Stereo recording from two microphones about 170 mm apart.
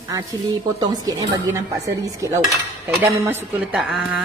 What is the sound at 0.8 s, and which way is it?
A woman's voice, 20° right (ahead or behind).